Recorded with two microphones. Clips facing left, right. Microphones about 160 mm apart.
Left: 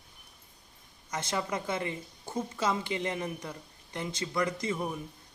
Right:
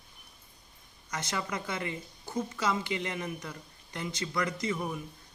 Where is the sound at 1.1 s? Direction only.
25° left (ahead or behind).